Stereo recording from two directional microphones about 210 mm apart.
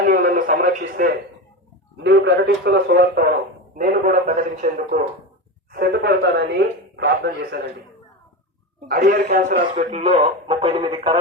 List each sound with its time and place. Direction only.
0.1 s a sound: 45° right (ahead or behind)
2.0 s a man's voice: 60° right (ahead or behind); by 5.0 s 35° right (ahead or behind)
5.7 s speech: 50° right (ahead or behind)
8.9 s speech: 45° right (ahead or behind)
10.0 s speech: 25° right (ahead or behind)